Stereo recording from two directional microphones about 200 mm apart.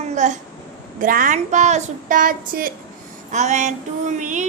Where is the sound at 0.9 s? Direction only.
45° right (ahead or behind).